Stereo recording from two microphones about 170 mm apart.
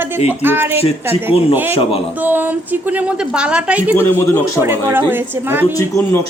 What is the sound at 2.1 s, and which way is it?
Speech, 10° right (ahead or behind).